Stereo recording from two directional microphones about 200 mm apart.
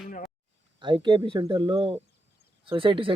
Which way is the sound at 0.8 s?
25° right (ahead or behind).